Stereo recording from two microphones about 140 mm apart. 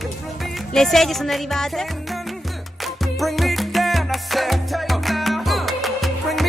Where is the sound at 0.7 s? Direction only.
Centre (ahead or behind).